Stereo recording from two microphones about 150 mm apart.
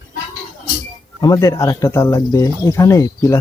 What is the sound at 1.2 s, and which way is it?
Speech, 25° left (ahead or behind).